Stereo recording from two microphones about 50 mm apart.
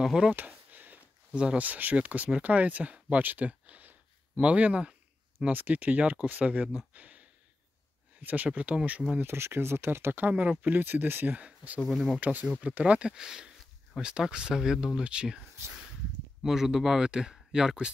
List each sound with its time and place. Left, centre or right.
0.0 s speech: centre
0.4 s a sound: right
1.3 s speech: right
3.2 s speech: right
3.6 s a sound: right
4.4 s speech: right
6.9 s a sound: right
8.2 s speech: right
8.5 s speech: right
9.2 s speech: right
11.3 s speech: right
16.4 s speech: centre